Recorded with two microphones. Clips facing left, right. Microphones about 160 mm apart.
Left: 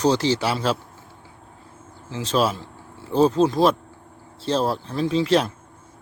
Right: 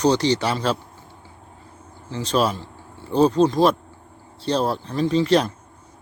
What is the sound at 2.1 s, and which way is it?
Speech, centre (ahead or behind).